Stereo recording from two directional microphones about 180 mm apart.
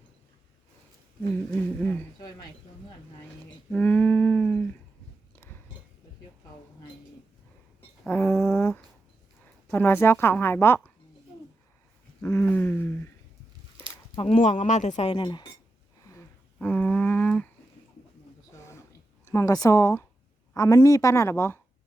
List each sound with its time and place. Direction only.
1.8 s a woman's voice: 10° left (ahead or behind)
3.7 s a sound: 10° left (ahead or behind)
8.0 s a sound: 10° left (ahead or behind)
9.7 s a woman's voice: 10° left (ahead or behind)
12.2 s a woman's voice: 10° left (ahead or behind)
14.2 s speech: 40° left (ahead or behind)
16.6 s a woman's voice: 10° left (ahead or behind)
18.5 s a sound: 15° left (ahead or behind)
19.2 s a woman's voice: 15° left (ahead or behind)